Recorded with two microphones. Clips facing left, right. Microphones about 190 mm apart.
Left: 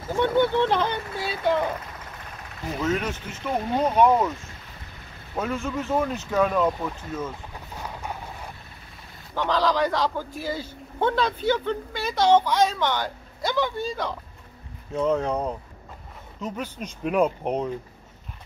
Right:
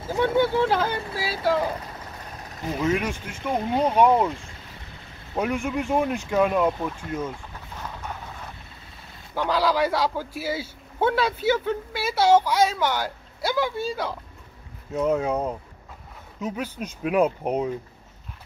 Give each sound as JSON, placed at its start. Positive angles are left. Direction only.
{"t": 0.1, "sound": "speech", "side_deg": -5}
{"t": 2.8, "sound": "a man's voice", "side_deg": -10}
{"t": 5.3, "sound": "a man's voice", "side_deg": -15}
{"t": 9.3, "sound": "a man's voice", "side_deg": -10}